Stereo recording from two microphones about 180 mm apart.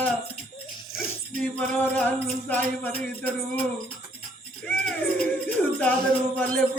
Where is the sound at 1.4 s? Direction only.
10° left (ahead or behind).